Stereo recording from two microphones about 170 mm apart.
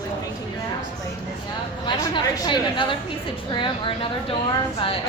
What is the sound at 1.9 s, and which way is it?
A woman's voice, 25° left (ahead or behind).